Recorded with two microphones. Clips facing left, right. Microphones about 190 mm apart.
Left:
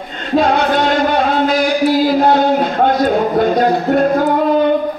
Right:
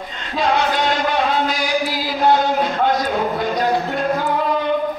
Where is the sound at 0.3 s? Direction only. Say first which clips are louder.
Left 6 dB; 55° left (ahead or behind).